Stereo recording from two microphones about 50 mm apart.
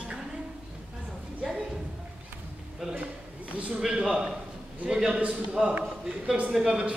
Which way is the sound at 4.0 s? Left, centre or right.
Centre.